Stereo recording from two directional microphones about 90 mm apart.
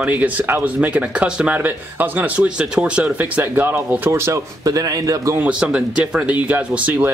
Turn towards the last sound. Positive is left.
turn(degrees=-20)  # may be behind; listen again after turning